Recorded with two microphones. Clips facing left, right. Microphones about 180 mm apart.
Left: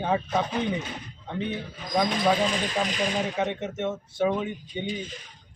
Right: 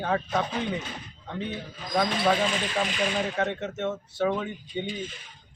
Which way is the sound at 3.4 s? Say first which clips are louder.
Left 1 dB; 15° left (ahead or behind).